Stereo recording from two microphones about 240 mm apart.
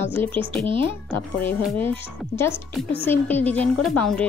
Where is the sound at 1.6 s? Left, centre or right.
Centre.